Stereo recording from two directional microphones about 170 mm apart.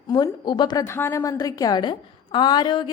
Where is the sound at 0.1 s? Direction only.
25° left (ahead or behind).